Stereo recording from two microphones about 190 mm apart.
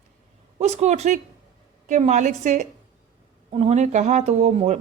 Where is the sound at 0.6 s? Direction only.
35° right (ahead or behind).